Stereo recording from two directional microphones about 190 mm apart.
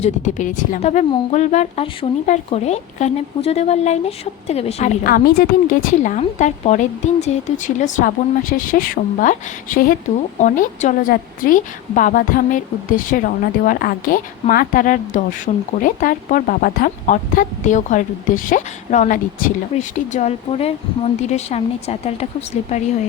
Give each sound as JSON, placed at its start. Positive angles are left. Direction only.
{"t": 0.0, "sound": "speech", "side_deg": 40}
{"t": 5.0, "sound": "speech", "side_deg": 50}